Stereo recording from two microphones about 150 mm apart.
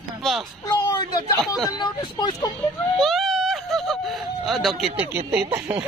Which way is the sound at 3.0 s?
Centre (ahead or behind).